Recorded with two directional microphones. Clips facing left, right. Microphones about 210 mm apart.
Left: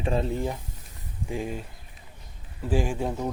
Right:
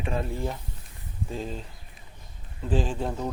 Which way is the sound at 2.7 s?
10° left (ahead or behind).